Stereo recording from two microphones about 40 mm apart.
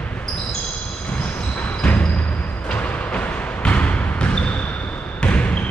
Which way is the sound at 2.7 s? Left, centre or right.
Left.